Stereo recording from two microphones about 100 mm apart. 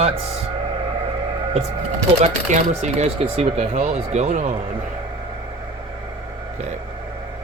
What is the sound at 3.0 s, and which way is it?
Speech, 75° right (ahead or behind).